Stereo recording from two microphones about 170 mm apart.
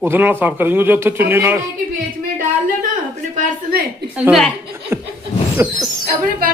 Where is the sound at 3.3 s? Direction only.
65° right (ahead or behind).